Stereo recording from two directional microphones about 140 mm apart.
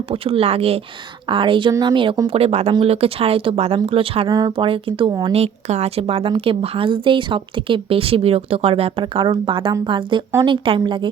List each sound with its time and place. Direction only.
0.1 s a woman's voice: 45° right (ahead or behind)
4.3 s speech: 25° right (ahead or behind)
4.6 s a woman's voice: 40° right (ahead or behind)
5.3 s a woman's voice: 50° right (ahead or behind); by 11.1 s 35° right (ahead or behind)